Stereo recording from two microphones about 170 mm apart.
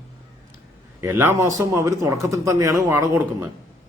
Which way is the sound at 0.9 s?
15° right (ahead or behind).